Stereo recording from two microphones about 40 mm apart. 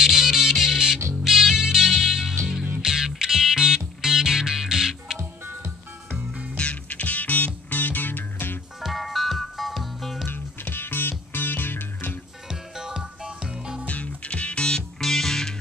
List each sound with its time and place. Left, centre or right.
0.0 s music: centre
5.4 s music: right
6.5 s music: left
8.8 s music: centre
10.2 s music: left
12.4 s music: centre
13.8 s music: left
15.0 s music: centre